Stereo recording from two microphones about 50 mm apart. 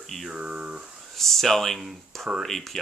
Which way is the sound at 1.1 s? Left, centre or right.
Centre.